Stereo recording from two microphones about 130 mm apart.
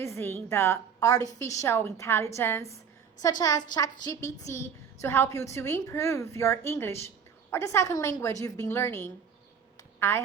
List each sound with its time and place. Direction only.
0.0 s a woman's voice: 20° left (ahead or behind)
3.2 s a woman's voice: 30° left (ahead or behind)